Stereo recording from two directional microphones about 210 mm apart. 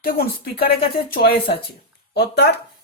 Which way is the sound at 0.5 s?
45° left (ahead or behind).